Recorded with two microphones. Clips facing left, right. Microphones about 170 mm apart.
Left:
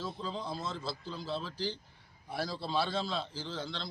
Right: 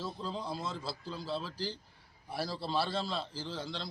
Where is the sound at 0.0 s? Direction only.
5° right (ahead or behind).